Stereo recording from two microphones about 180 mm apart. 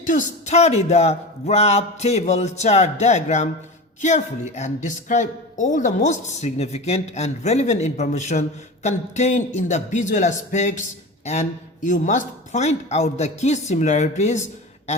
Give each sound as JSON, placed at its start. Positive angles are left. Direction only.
{"t": 0.0, "sound": "a woman's voice", "side_deg": 45}
{"t": 11.9, "sound": "a woman's voice", "side_deg": 45}